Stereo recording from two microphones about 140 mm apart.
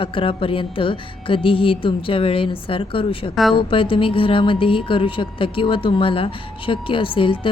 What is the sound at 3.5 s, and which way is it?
Speech, 40° left (ahead or behind).